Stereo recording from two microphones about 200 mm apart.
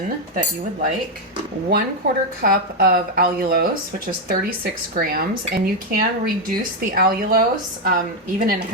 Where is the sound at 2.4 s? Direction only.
45° right (ahead or behind).